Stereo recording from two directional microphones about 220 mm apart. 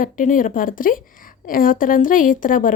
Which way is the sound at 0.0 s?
35° left (ahead or behind).